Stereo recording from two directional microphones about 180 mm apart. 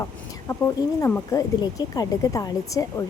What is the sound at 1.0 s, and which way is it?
Speech, 15° left (ahead or behind).